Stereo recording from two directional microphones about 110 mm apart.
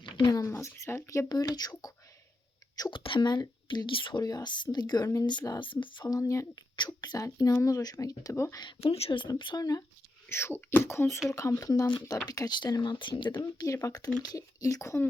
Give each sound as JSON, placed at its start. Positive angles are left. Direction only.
{"t": 0.0, "sound": "a sound", "side_deg": 45}
{"t": 0.4, "sound": "speech", "side_deg": 20}
{"t": 2.9, "sound": "speech", "side_deg": 50}
{"t": 5.5, "sound": "speech", "side_deg": 45}
{"t": 6.7, "sound": "speech", "side_deg": 40}
{"t": 8.9, "sound": "speech", "side_deg": 65}
{"t": 9.4, "sound": "speech", "side_deg": 40}
{"t": 10.2, "sound": "speech", "side_deg": 20}